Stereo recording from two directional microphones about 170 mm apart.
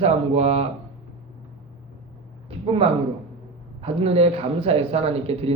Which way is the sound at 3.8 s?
35° right (ahead or behind).